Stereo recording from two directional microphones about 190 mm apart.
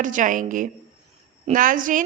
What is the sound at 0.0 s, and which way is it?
A woman's voice, 45° right (ahead or behind).